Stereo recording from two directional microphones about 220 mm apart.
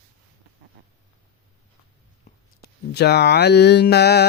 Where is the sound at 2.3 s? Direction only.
30° left (ahead or behind).